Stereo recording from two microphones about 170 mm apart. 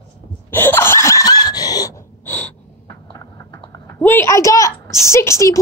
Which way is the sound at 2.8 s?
20° left (ahead or behind).